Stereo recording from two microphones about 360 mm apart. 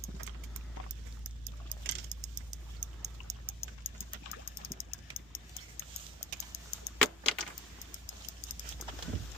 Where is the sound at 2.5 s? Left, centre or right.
Centre.